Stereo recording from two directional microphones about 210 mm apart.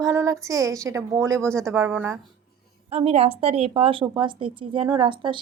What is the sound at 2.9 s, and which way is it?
A woman's voice, 30° right (ahead or behind).